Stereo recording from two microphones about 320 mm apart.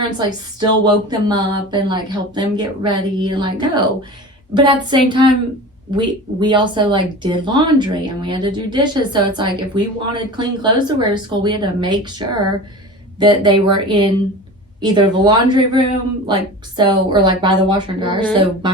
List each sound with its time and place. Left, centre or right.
0.0 s speech: centre
13.1 s speech: centre